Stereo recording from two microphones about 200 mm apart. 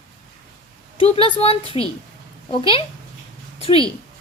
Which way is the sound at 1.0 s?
30° left (ahead or behind).